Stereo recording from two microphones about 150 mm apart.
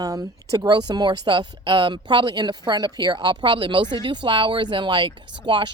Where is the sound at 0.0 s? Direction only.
25° right (ahead or behind).